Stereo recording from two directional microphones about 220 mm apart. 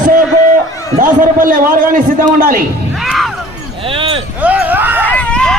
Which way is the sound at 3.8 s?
25° right (ahead or behind).